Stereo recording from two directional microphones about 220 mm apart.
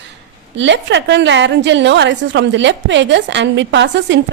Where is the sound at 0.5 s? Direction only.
55° right (ahead or behind).